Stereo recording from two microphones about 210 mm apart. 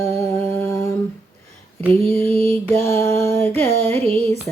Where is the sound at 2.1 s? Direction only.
10° left (ahead or behind).